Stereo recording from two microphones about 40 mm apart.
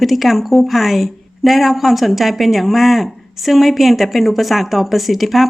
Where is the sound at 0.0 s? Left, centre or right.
Centre.